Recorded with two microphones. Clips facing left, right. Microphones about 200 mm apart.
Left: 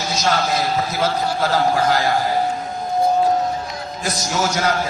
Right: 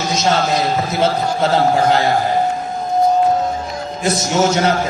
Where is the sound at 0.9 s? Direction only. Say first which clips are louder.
Right 4 dB; 25° right (ahead or behind).